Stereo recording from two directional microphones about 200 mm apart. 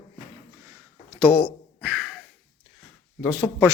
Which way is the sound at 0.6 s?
15° right (ahead or behind).